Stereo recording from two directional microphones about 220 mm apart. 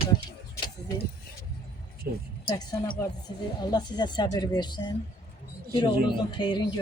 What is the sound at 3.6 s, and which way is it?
Speech, 20° left (ahead or behind).